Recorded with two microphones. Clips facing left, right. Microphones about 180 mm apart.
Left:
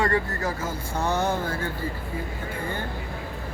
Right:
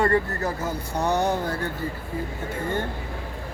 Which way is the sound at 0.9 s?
15° right (ahead or behind).